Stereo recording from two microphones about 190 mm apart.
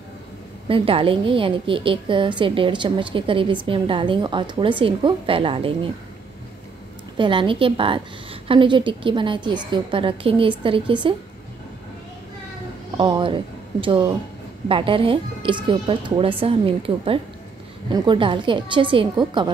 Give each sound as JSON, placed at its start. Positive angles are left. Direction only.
{"t": 0.7, "sound": "a woman's voice", "side_deg": -30}
{"t": 7.2, "sound": "a woman's voice", "side_deg": -25}
{"t": 12.9, "sound": "a woman's voice", "side_deg": -25}